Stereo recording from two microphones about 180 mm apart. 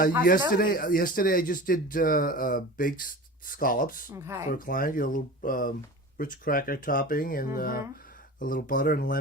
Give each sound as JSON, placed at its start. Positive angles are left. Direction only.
{"t": 0.3, "sound": "a man's voice", "side_deg": 50}
{"t": 4.1, "sound": "speech", "side_deg": -15}
{"t": 4.5, "sound": "a man's voice", "side_deg": 50}